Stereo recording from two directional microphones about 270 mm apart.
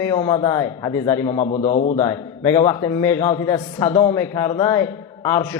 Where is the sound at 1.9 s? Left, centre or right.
Centre.